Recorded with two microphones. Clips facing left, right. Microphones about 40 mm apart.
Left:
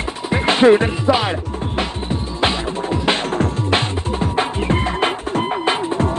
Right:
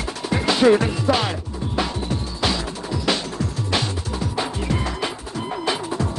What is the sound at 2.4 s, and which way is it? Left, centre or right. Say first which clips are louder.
Music: left 6 dB; left.